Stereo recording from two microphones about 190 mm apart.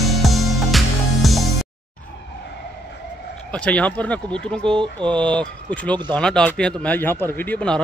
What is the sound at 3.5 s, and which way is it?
Speech, 5° left (ahead or behind).